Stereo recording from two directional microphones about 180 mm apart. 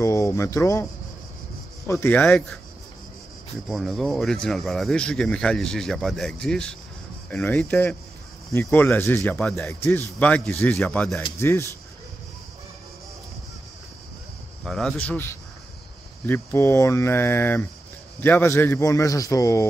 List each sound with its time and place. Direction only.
0.0 s speech: 15° left (ahead or behind)
1.9 s speech: 10° left (ahead or behind)
3.6 s speech: centre (ahead or behind)
14.6 s speech: centre (ahead or behind); by 19.7 s 15° left (ahead or behind)